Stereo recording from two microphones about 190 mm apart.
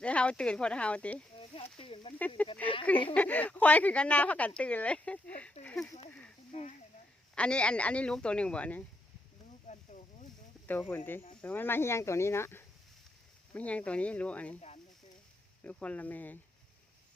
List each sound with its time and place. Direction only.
0.0 s a man's voice: 5° left (ahead or behind)
1.8 s speech: 30° left (ahead or behind)
2.4 s a man's voice: 5° left (ahead or behind)
6.5 s speech: 35° left (ahead or behind)
7.3 s a man's voice: 5° left (ahead or behind)
9.6 s a sound: 40° left (ahead or behind)
10.7 s speech: 10° left (ahead or behind)
15.6 s speech: 5° left (ahead or behind)